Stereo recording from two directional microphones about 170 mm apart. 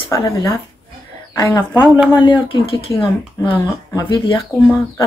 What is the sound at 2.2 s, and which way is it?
Speech, 30° left (ahead or behind).